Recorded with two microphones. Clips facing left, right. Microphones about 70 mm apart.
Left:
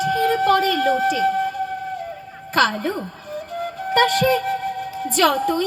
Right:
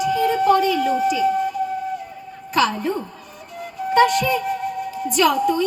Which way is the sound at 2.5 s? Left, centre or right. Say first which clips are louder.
Left 1 dB; left.